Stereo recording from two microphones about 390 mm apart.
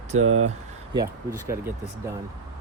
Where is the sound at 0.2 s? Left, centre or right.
Right.